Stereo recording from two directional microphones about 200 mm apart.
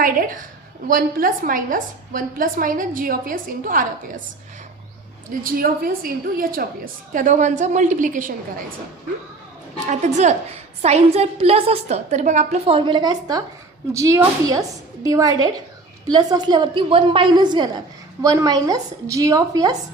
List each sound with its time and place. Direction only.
0.0 s a woman's voice: 45° right (ahead or behind)
5.3 s a woman's voice: 45° right (ahead or behind)
9.8 s a woman's voice: 35° right (ahead or behind); by 19.7 s 15° right (ahead or behind)